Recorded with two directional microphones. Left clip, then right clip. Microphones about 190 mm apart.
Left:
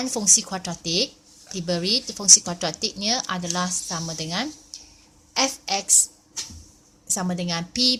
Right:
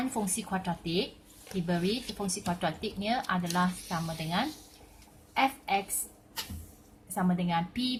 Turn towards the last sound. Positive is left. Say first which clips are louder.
# left 9 dB
turn(degrees=45)  # may be behind; listen again after turning